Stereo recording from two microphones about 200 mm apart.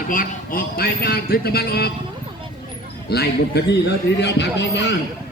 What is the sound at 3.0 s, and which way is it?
A man's voice, 55° left (ahead or behind).